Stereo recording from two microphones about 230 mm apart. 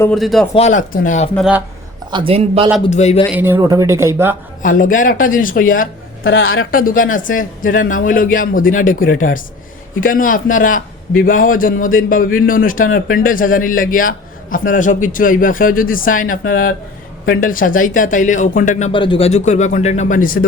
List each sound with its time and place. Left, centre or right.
0.0 s speech: centre
0.5 s a man's voice: left
1.4 s speech: centre
2.0 s speech: right
2.8 s a man's voice: left
3.3 s speech: centre
4.6 s a man's voice: left
6.2 s a woman's voice: left
6.7 s a man's voice: left